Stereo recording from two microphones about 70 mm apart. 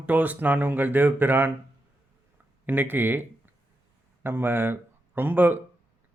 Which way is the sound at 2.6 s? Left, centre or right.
Right.